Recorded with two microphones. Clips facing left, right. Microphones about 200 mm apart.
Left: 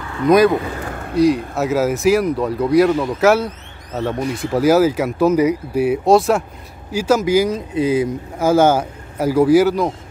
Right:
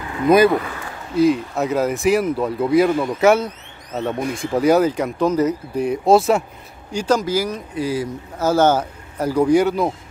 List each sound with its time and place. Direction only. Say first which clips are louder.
0.2 s speech: left 1 dB; centre (ahead or behind)
0.8 s a sound: left 5 dB; 55° left (ahead or behind)
1.1 s speech: left 1 dB; centre (ahead or behind)